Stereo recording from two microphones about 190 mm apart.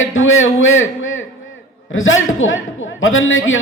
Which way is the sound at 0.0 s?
90° left.